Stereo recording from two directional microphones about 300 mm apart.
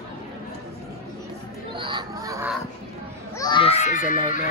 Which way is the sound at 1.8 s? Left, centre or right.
Centre.